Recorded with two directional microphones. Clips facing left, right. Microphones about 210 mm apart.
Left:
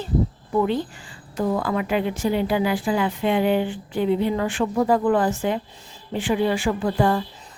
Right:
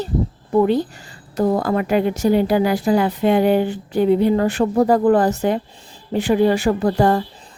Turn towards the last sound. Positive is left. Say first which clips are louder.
# right 4 dB
turn(degrees=-40)  # may be behind; listen again after turning